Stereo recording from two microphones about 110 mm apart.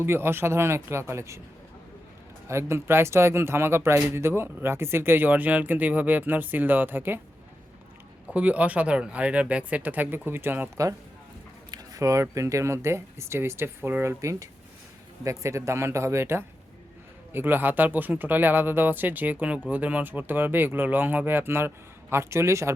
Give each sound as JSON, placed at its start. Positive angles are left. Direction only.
{"t": 0.0, "sound": "speech", "side_deg": -20}
{"t": 2.5, "sound": "speech", "side_deg": -25}
{"t": 8.3, "sound": "speech", "side_deg": -10}
{"t": 11.7, "sound": "speech", "side_deg": -30}